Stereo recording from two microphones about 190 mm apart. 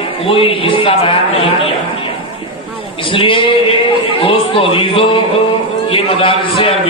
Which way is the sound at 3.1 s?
25° left (ahead or behind).